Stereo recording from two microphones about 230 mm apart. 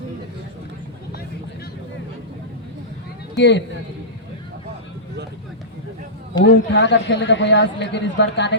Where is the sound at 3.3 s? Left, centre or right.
Left.